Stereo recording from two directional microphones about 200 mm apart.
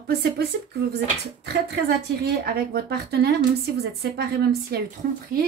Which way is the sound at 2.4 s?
50° right (ahead or behind).